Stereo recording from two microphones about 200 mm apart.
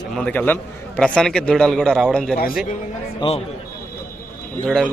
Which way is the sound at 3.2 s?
30° left (ahead or behind).